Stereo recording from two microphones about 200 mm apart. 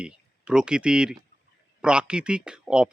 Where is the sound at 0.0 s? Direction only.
5° right (ahead or behind).